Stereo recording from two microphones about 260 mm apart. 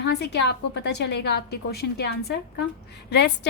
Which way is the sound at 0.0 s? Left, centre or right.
Left.